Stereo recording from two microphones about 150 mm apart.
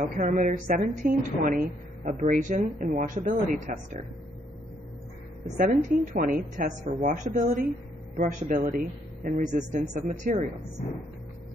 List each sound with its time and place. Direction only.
0.2 s speech: 65° right (ahead or behind)
2.0 s speech: 50° right (ahead or behind)
5.6 s speech: 65° right (ahead or behind)